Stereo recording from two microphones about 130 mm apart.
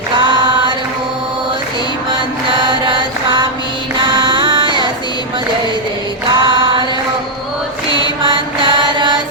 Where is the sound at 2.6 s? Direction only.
35° right (ahead or behind).